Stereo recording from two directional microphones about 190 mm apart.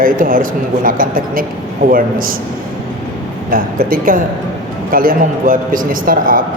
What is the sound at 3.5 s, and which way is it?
A man's voice, 50° right (ahead or behind).